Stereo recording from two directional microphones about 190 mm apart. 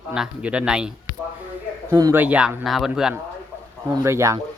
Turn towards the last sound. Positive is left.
turn(degrees=-15)  # may be behind; listen again after turning